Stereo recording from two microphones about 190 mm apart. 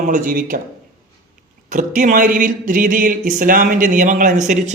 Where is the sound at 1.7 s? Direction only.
40° right (ahead or behind).